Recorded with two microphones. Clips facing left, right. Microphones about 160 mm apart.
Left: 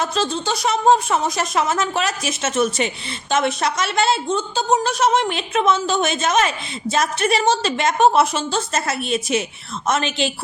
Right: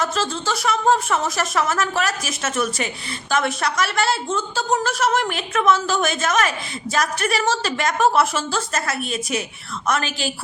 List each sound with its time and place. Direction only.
0.0 s speech: 20° left (ahead or behind)